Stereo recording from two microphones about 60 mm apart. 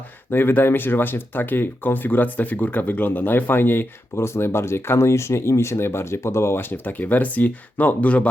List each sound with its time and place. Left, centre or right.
0.3 s speech: left